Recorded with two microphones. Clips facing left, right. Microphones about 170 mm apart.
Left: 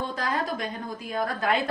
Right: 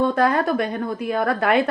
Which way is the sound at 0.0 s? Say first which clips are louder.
Right 10 dB; 60° right (ahead or behind).